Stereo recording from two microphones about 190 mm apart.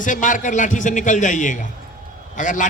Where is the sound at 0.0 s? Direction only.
45° left (ahead or behind).